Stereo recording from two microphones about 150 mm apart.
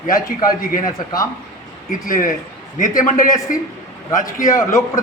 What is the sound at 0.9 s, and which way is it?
Speech, 25° left (ahead or behind).